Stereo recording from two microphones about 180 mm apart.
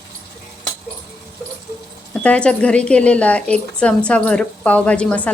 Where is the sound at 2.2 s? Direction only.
5° left (ahead or behind).